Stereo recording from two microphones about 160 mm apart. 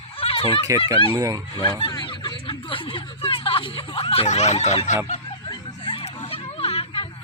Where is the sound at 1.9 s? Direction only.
25° left (ahead or behind); by 4.9 s 45° left (ahead or behind).